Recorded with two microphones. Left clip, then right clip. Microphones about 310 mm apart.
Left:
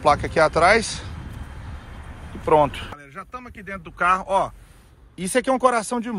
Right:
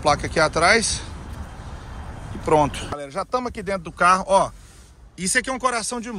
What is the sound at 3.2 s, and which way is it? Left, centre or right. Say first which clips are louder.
Speech: right 14 dB; right.